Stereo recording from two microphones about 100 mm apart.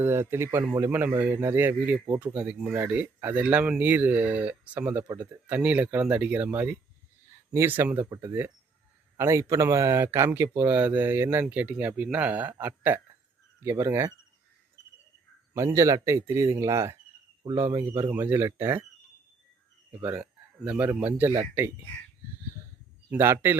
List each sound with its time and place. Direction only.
0.0 s speech: 25° right (ahead or behind)
8.1 s speech: 40° right (ahead or behind)
15.5 s speech: 30° right (ahead or behind)
20.1 s speech: 10° right (ahead or behind)
21.2 s speech: 25° right (ahead or behind)
23.0 s speech: 25° right (ahead or behind)